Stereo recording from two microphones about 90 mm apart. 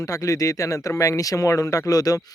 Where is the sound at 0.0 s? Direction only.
35° left (ahead or behind).